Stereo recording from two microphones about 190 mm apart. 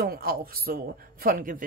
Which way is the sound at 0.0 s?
55° right (ahead or behind).